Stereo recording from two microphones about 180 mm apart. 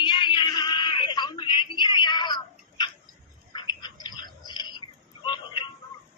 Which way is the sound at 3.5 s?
25° left (ahead or behind).